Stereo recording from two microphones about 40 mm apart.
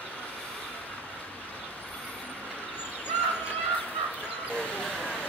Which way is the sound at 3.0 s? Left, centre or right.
Left.